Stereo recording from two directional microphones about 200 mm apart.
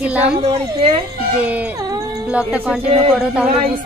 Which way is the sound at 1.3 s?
5° right (ahead or behind).